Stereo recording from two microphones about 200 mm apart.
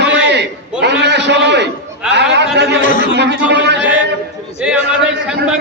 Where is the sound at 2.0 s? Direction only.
5° right (ahead or behind).